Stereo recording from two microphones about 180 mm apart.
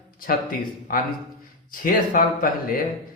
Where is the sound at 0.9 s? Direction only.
50° left (ahead or behind).